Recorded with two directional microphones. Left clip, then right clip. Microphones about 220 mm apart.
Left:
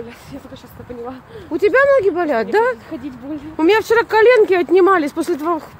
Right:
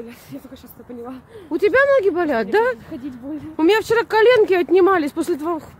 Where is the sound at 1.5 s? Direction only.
25° right (ahead or behind).